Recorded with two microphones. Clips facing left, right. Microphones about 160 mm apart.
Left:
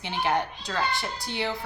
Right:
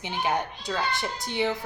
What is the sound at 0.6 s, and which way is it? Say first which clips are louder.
Speech: even; 20° right (ahead or behind).